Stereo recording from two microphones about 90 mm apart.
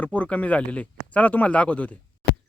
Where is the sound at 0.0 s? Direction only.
15° left (ahead or behind).